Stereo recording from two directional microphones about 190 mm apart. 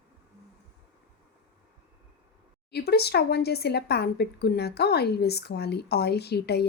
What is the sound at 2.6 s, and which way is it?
Speech, 60° left (ahead or behind).